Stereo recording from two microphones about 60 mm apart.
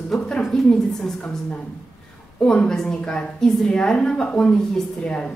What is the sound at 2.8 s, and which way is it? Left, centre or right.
A woman's voice, centre.